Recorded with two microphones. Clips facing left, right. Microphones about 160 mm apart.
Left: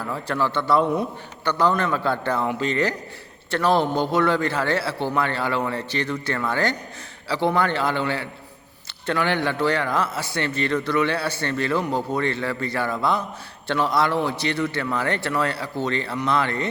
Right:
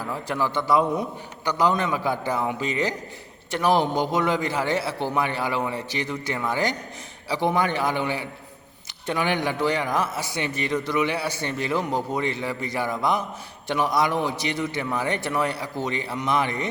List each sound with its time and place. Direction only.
0.0 s a man's voice: 15° right (ahead or behind)